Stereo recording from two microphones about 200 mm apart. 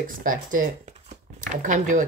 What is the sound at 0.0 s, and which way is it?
Speech, 45° right (ahead or behind).